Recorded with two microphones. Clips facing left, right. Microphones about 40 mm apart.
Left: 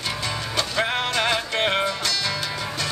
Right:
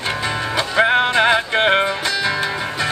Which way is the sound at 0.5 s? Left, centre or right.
Right.